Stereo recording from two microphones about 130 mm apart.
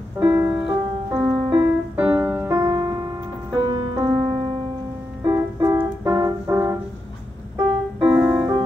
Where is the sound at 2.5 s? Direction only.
25° right (ahead or behind).